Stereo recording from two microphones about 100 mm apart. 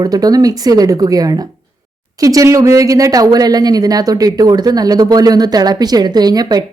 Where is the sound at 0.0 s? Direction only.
40° right (ahead or behind).